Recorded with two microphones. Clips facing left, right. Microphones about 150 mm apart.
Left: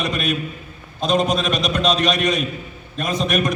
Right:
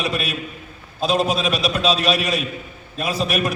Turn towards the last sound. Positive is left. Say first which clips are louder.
# left 1 dB
turn(degrees=-5)  # may be behind; listen again after turning